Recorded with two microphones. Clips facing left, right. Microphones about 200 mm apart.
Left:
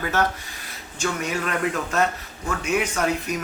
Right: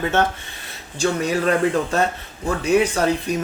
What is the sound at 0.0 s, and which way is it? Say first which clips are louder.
Speech: right 4 dB; 25° right (ahead or behind).